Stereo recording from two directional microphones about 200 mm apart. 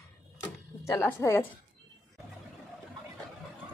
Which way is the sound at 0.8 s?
15° left (ahead or behind).